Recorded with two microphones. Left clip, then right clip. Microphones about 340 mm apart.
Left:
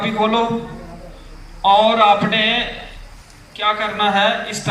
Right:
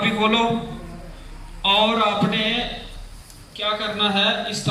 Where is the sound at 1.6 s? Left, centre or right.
Centre.